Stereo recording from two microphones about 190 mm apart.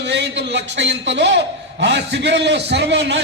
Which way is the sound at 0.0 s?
65° right (ahead or behind).